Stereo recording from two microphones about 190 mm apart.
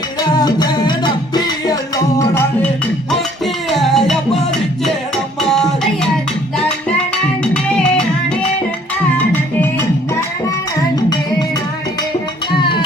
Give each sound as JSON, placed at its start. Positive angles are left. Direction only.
{"t": 0.2, "sound": "music", "side_deg": 20}
{"t": 3.4, "sound": "music", "side_deg": 0}
{"t": 7.8, "sound": "music", "side_deg": 5}
{"t": 9.1, "sound": "music", "side_deg": 10}
{"t": 12.5, "sound": "music", "side_deg": 25}